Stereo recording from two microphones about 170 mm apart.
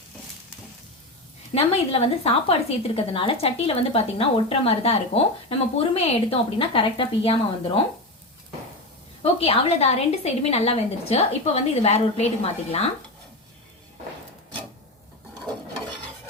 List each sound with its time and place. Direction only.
1.5 s a woman's voice: 35° left (ahead or behind)
9.2 s a woman's voice: 35° left (ahead or behind)